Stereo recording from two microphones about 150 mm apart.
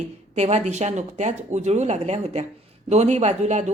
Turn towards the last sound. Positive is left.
turn(degrees=-50)  # may be behind; listen again after turning